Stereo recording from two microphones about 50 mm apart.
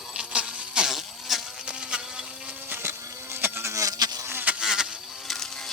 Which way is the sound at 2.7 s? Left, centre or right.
Right.